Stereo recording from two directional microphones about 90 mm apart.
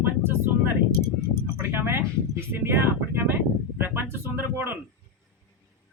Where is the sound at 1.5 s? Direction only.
25° right (ahead or behind).